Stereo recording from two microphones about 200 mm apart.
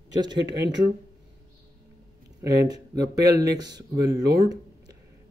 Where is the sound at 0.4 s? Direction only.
60° right (ahead or behind).